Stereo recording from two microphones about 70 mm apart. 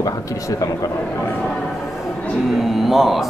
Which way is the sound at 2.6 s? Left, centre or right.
Centre.